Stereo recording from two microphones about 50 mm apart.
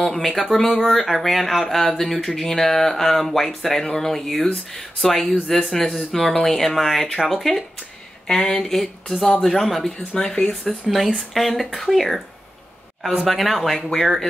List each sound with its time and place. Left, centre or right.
0.0 s speech: centre
8.3 s speech: centre
10.1 s speech: centre
10.7 s speech: centre
13.2 s speech: centre